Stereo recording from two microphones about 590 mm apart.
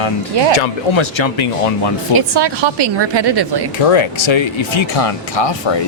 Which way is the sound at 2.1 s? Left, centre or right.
Right.